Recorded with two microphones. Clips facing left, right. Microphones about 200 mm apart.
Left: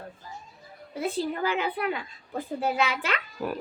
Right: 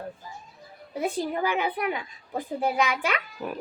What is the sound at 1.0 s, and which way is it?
A child's voice, 15° right (ahead or behind).